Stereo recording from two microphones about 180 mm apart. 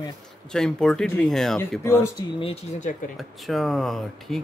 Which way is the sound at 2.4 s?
35° left (ahead or behind).